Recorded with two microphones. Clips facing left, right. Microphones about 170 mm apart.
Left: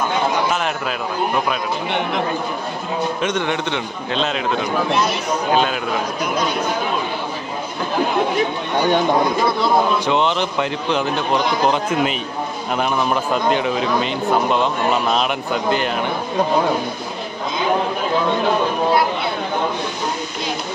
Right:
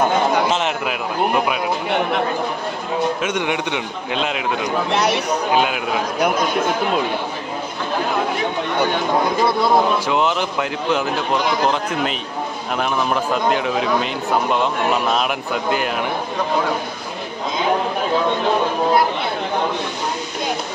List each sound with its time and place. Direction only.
0.5 s a man's voice: 20° right (ahead or behind)
3.2 s a man's voice: 10° right (ahead or behind)
4.9 s speech: 70° right (ahead or behind)
5.5 s a man's voice: 15° right (ahead or behind)
9.6 s speech: 5° right (ahead or behind)